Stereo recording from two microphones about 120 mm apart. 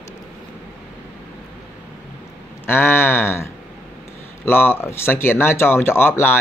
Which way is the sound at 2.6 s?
20° left (ahead or behind).